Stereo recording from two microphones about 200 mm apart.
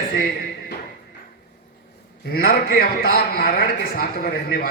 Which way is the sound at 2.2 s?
50° left (ahead or behind).